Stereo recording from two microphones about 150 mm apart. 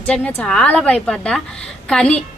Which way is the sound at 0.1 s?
10° left (ahead or behind).